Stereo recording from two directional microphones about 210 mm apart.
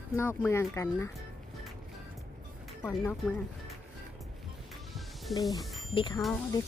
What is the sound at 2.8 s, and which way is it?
Speech, 10° left (ahead or behind).